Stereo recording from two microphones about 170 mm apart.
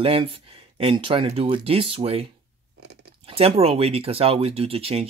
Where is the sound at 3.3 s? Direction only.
35° right (ahead or behind).